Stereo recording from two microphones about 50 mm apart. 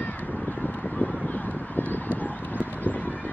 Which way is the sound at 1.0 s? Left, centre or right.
Left.